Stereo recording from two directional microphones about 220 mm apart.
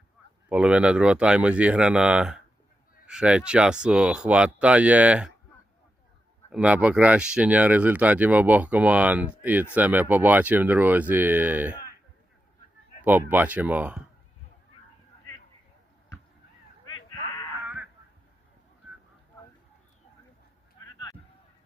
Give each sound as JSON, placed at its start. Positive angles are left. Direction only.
{"t": 0.4, "sound": "speech", "side_deg": -5}
{"t": 6.5, "sound": "speech", "side_deg": -5}
{"t": 13.0, "sound": "speech", "side_deg": -10}
{"t": 16.9, "sound": "a sound", "side_deg": 20}